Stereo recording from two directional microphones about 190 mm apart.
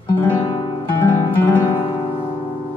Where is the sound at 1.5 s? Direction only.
10° left (ahead or behind).